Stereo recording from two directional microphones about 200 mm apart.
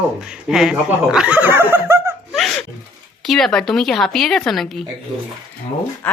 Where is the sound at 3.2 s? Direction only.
Centre (ahead or behind).